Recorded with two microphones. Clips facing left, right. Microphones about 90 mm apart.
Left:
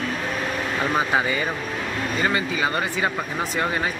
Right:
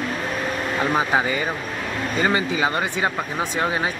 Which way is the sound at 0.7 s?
5° right (ahead or behind).